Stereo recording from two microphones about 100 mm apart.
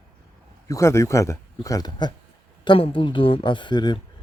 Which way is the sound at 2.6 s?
60° left (ahead or behind).